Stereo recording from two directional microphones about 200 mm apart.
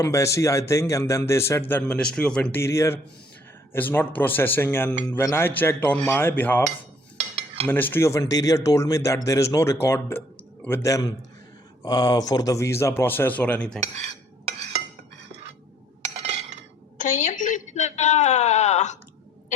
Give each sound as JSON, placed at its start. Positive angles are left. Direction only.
{"t": 0.0, "sound": "speech", "side_deg": 15}
{"t": 7.3, "sound": "cutlery", "side_deg": -30}
{"t": 7.7, "sound": "speech", "side_deg": 10}
{"t": 13.7, "sound": "cutlery", "side_deg": -35}
{"t": 17.0, "sound": "a woman's voice", "side_deg": 35}